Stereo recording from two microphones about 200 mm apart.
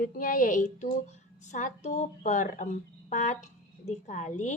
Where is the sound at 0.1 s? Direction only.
40° left (ahead or behind).